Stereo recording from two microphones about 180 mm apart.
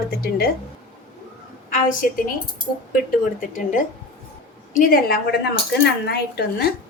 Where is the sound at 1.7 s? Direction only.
50° left (ahead or behind).